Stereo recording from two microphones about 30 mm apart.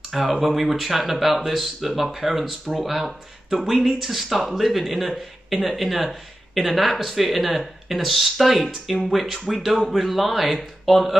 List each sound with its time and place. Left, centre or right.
0.1 s speech: centre